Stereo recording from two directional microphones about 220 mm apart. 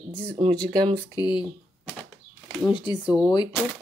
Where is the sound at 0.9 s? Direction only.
20° left (ahead or behind).